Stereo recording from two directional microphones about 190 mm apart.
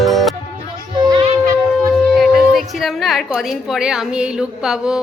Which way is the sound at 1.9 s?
Centre (ahead or behind).